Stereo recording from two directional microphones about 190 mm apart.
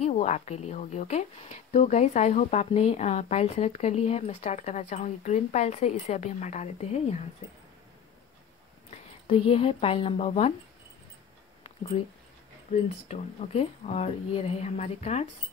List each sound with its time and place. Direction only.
0.0 s a woman's voice: 35° left (ahead or behind)
8.9 s speech: 30° left (ahead or behind)
13.1 s a woman's voice: 35° left (ahead or behind)